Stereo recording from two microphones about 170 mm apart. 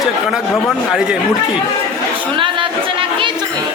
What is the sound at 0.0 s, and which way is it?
Speech, centre (ahead or behind).